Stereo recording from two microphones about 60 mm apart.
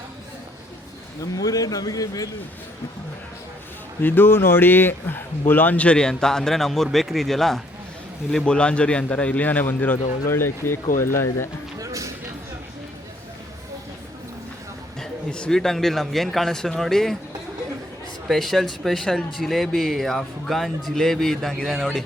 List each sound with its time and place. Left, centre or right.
1.2 s a man's voice: left
4.0 s speech: left; by 7.6 s centre
8.4 s a man's voice: centre; by 11.4 s left
11.8 s music: right
15.0 s speech: centre
18.3 s speech: centre
21.6 s speech: centre